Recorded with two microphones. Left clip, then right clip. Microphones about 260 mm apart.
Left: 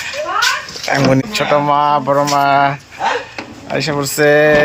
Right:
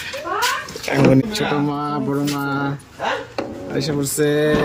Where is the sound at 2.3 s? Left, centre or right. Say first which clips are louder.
Left 12 dB; left.